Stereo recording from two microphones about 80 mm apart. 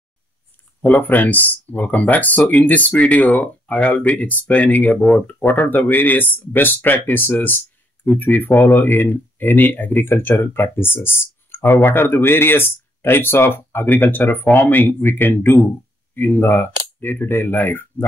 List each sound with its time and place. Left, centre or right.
0.8 s speech: left